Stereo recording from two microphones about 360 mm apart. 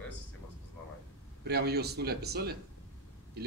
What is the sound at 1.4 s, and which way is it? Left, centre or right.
Speech, right.